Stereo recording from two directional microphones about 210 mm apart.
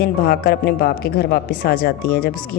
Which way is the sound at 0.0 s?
45° left (ahead or behind).